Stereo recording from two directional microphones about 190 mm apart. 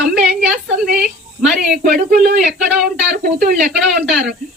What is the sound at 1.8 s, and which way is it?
Speech, 50° right (ahead or behind).